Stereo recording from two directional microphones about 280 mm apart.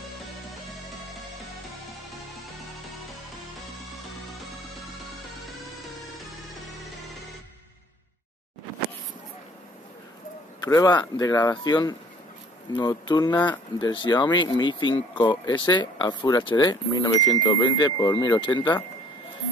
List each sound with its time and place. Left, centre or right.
0.5 s music: centre
10.6 s speech: centre